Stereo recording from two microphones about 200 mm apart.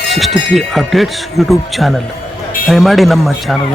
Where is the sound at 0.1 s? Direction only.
Centre (ahead or behind).